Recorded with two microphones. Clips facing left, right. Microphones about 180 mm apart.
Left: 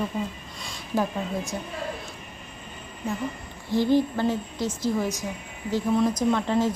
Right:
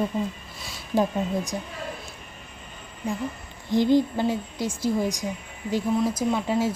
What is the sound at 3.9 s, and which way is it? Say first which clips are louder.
A woman's voice: right 1 dB; 15° right (ahead or behind).